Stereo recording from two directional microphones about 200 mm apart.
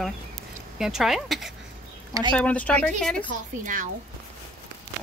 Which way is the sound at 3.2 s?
40° right (ahead or behind).